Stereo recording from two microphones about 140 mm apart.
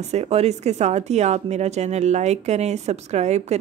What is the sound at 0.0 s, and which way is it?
Speech, 50° right (ahead or behind).